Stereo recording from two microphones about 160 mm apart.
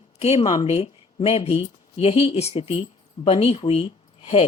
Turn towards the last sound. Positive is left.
turn(degrees=40)  # may be behind; listen again after turning